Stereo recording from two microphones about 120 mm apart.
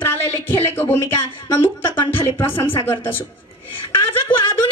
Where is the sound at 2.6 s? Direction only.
20° left (ahead or behind).